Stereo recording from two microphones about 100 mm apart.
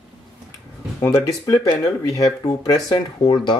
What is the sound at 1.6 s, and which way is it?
Speech, 40° left (ahead or behind).